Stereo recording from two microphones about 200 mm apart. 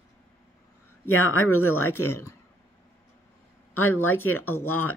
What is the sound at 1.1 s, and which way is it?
Speech, 90° left.